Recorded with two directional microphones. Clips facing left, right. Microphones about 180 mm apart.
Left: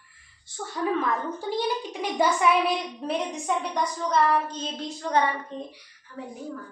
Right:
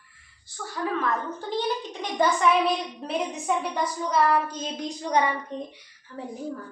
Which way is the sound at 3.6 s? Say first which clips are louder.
Even; 5° right (ahead or behind).